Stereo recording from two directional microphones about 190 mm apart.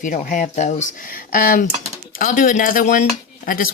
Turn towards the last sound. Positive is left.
turn(degrees=45)  # may be behind; listen again after turning